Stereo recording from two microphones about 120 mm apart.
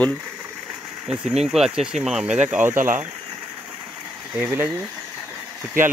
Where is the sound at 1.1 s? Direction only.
60° right (ahead or behind).